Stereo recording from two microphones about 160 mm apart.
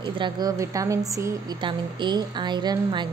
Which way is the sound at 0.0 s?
25° right (ahead or behind).